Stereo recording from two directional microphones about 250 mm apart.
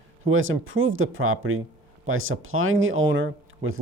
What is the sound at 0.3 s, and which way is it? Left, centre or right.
Speech, right.